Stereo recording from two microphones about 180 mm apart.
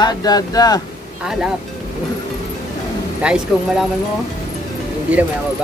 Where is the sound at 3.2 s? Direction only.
5° right (ahead or behind).